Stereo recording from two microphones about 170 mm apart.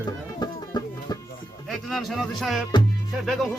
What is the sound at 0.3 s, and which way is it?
Music, 25° left (ahead or behind).